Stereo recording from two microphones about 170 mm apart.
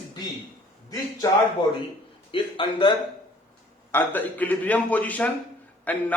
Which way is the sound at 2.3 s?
30° left (ahead or behind).